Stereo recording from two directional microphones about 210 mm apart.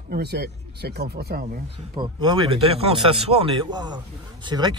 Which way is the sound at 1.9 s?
20° right (ahead or behind).